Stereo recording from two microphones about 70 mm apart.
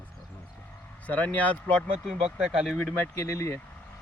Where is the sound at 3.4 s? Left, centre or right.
Left.